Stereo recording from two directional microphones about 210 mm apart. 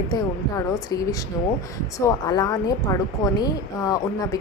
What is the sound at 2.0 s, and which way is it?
A woman's voice, 20° left (ahead or behind).